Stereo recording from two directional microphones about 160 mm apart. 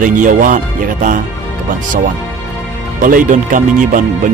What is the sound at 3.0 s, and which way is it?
Speech, 55° right (ahead or behind).